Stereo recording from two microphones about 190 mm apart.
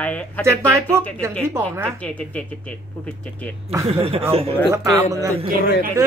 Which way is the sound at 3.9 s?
30° right (ahead or behind).